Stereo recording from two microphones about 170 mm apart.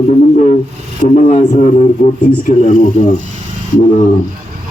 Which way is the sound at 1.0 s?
45° left (ahead or behind).